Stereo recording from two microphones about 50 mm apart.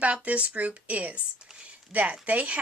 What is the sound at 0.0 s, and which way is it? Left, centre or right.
Speech, right.